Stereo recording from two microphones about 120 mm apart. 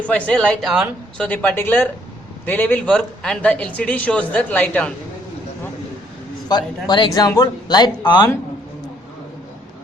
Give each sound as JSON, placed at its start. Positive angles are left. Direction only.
{"t": 0.0, "sound": "a woman's voice", "side_deg": 10}
{"t": 6.5, "sound": "speech", "side_deg": 35}